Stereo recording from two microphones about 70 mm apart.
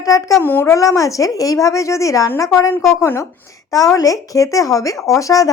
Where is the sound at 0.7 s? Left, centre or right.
Left.